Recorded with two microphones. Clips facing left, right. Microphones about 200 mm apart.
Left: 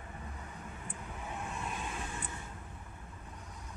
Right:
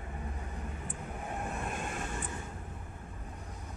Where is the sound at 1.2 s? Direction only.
55° right (ahead or behind).